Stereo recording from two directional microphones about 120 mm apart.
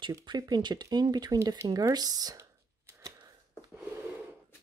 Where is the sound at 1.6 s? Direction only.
30° right (ahead or behind).